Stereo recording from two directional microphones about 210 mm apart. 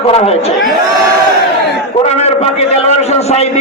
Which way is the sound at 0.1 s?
30° left (ahead or behind).